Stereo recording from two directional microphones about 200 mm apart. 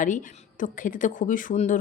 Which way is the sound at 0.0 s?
40° left (ahead or behind).